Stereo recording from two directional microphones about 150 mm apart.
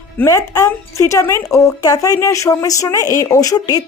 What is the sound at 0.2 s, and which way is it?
Speech, 20° left (ahead or behind).